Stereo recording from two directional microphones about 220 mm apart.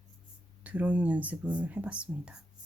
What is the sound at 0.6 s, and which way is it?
Speech, 5° right (ahead or behind).